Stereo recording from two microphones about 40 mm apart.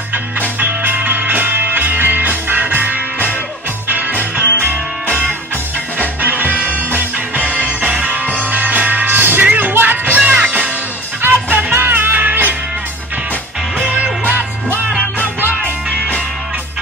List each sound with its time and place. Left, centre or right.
0.6 s music: right
11.5 s music: right
12.2 s music: right
13.8 s music: right